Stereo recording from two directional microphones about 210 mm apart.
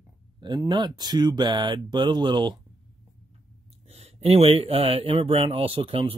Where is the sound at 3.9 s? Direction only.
30° right (ahead or behind).